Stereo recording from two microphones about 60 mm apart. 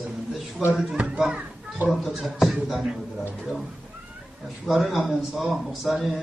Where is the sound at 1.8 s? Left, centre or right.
Right.